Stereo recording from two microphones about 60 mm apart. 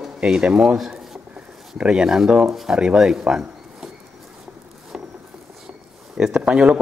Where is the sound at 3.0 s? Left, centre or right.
Centre.